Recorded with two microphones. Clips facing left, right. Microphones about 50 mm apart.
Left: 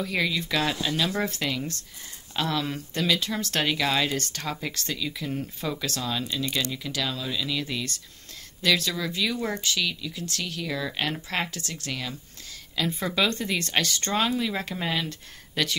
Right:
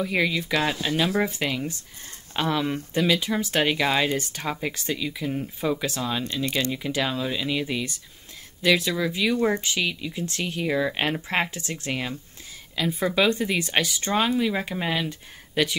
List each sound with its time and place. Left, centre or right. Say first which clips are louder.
0.0 s speech: right 3 dB; centre
12.7 s speech: right 3 dB; centre